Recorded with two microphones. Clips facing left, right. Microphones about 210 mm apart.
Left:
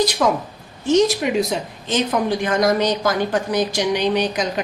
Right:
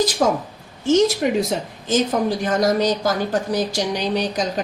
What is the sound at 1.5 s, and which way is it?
Speech, 45° right (ahead or behind).